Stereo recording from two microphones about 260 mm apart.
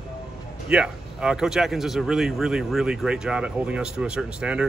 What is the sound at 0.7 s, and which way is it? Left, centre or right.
Speech, centre.